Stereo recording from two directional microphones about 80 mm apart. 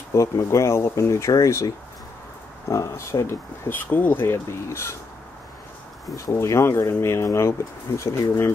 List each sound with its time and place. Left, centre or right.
0.1 s speech: left
2.7 s speech: left
6.1 s speech: left